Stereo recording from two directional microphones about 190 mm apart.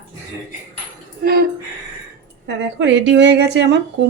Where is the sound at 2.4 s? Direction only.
70° right (ahead or behind).